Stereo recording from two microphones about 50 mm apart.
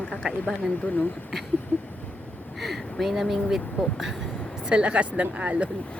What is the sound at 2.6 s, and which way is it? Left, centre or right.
Speech, centre.